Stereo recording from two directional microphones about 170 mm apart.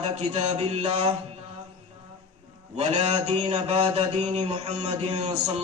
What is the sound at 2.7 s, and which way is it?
Mantra, 40° right (ahead or behind).